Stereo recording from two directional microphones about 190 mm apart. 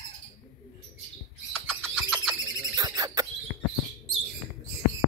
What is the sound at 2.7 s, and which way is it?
Bird, 20° right (ahead or behind).